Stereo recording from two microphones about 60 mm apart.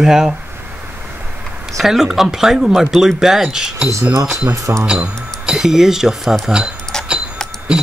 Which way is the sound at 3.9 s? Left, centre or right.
Right.